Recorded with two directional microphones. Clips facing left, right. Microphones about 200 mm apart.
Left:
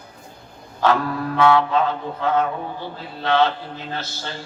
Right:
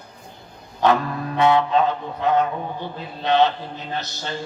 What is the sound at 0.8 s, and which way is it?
Mantra, 20° right (ahead or behind).